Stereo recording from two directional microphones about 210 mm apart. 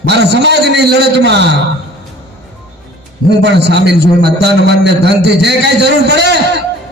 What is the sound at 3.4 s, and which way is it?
A man's voice, 55° right (ahead or behind).